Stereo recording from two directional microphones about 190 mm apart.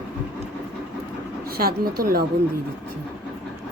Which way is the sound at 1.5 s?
55° right (ahead or behind).